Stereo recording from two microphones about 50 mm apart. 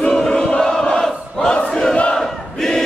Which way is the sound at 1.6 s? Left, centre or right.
Centre.